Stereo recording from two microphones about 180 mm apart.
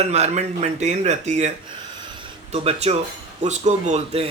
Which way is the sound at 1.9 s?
30° right (ahead or behind).